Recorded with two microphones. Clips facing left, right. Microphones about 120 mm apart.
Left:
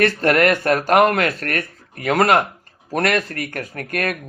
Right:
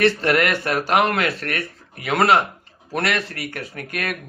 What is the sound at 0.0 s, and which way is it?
Speech, 45° left (ahead or behind).